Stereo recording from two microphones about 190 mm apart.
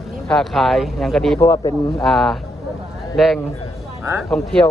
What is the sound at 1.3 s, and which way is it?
Speech, 15° left (ahead or behind).